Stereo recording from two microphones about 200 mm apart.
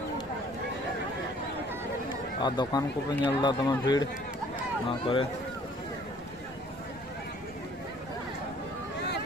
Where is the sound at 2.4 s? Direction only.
25° left (ahead or behind).